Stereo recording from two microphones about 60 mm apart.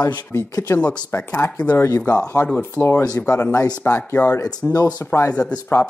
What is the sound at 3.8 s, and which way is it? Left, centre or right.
Speech, left.